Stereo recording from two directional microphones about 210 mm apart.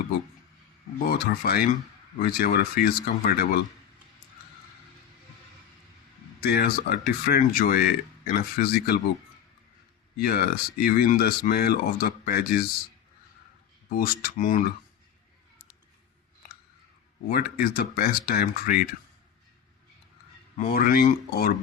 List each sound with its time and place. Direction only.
0.9 s speech: 45° left (ahead or behind)
6.4 s speech: 50° left (ahead or behind)
10.2 s speech: 45° left (ahead or behind)
13.9 s speech: 45° left (ahead or behind)
17.2 s speech: 45° left (ahead or behind)
20.6 s speech: 45° left (ahead or behind)